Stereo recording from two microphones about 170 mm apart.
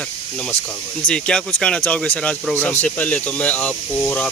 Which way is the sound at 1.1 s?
5° left (ahead or behind).